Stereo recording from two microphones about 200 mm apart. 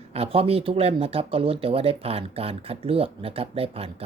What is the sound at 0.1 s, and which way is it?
Speech, 30° right (ahead or behind).